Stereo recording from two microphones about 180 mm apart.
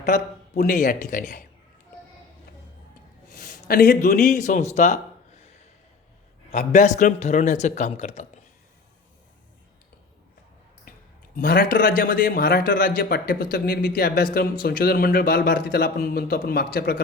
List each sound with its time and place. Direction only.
0.6 s speech: 45° left (ahead or behind)
3.3 s speech: 55° left (ahead or behind); by 5.5 s 40° left (ahead or behind)
6.5 s a man's voice: 40° left (ahead or behind)
11.3 s a man's voice: 60° left (ahead or behind)